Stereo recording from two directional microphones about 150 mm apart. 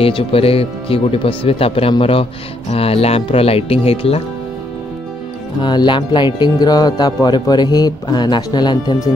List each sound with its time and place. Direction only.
0.0 s speech: 40° left (ahead or behind)
5.6 s speech: 30° left (ahead or behind)